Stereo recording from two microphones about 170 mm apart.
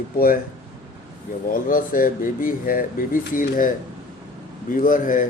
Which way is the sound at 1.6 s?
55° left (ahead or behind).